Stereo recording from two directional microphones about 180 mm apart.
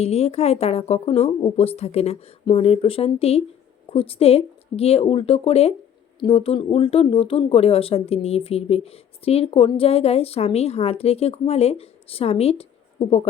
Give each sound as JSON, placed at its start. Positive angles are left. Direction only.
{"t": 0.0, "sound": "speech", "side_deg": 35}